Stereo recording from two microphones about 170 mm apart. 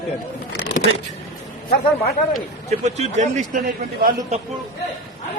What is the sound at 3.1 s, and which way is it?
A man's voice, 45° right (ahead or behind).